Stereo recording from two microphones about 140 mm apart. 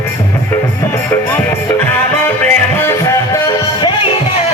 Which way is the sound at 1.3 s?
15° left (ahead or behind).